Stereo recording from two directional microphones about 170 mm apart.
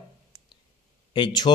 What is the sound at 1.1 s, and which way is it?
Speech, 25° left (ahead or behind).